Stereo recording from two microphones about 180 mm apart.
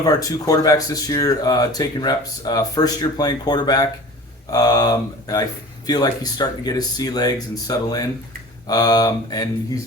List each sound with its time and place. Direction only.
0.0 s speech: 20° left (ahead or behind)